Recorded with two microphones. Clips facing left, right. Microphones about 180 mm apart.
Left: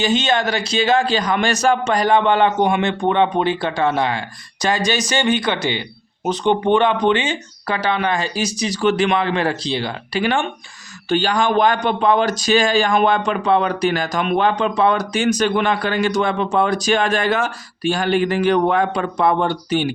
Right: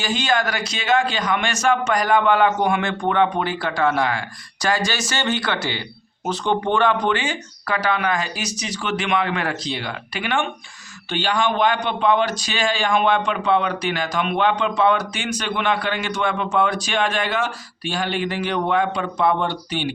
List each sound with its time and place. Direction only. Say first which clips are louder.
0.0 s a man's voice: left 4 dB; 20° left (ahead or behind); by 19.9 s 45° left (ahead or behind)